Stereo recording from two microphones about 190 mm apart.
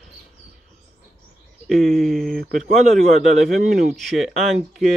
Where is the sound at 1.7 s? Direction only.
Centre (ahead or behind).